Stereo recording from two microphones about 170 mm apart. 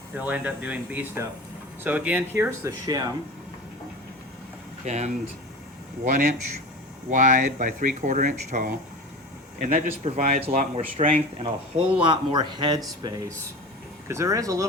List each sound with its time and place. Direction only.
0.1 s speech: 10° right (ahead or behind)
4.9 s speech: 40° right (ahead or behind)
6.1 s speech: 55° right (ahead or behind); by 14.6 s 20° right (ahead or behind)